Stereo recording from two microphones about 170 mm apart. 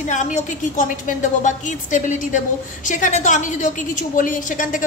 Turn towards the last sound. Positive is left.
turn(degrees=50)  # may be behind; listen again after turning